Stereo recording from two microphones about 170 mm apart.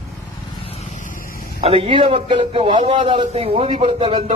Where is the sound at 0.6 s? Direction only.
35° left (ahead or behind); by 1.3 s 55° left (ahead or behind).